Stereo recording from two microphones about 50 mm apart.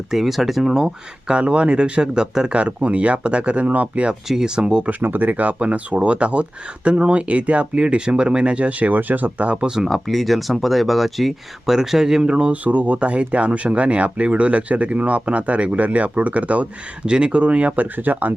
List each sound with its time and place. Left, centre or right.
0.1 s speech: centre
1.3 s speech: right
4.3 s speech: centre
4.9 s speech: right; by 9.9 s centre
9.9 s speech: centre; by 18.3 s right